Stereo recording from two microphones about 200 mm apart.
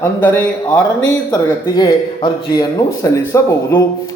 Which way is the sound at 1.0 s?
20° left (ahead or behind).